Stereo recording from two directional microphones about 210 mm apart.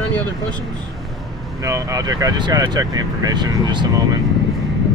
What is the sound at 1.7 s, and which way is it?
Speech, 15° right (ahead or behind).